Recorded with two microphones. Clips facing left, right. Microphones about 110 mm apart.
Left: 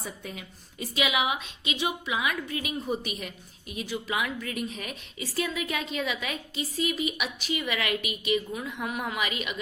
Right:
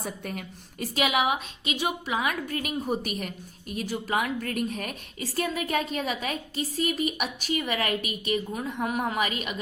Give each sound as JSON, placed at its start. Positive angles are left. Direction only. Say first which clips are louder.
{"t": 0.0, "sound": "a woman's voice", "louder": "right 4 dB", "side_deg": -55}